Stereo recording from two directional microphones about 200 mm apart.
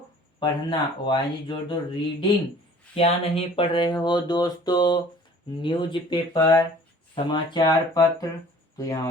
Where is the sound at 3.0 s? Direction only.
30° left (ahead or behind).